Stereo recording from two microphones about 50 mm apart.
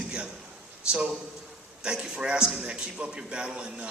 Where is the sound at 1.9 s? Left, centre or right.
Centre.